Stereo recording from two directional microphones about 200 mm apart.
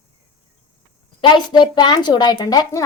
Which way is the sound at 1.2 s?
20° left (ahead or behind).